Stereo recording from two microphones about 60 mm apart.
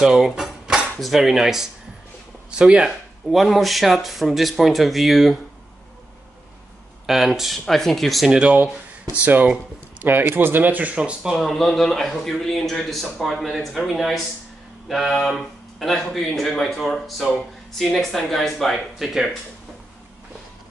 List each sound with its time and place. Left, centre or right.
0.0 s cutlery: centre
0.9 s speech: centre
7.1 s speech: centre
8.3 s speech: centre
11.3 s speech: centre